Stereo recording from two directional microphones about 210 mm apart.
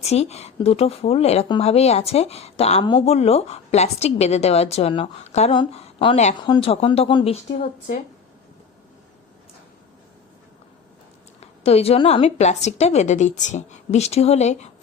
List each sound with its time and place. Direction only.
0.0 s speech: 30° left (ahead or behind)
11.3 s a woman's voice: 30° left (ahead or behind)